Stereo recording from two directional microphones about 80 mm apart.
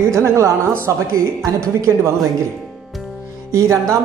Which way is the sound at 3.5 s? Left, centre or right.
Right.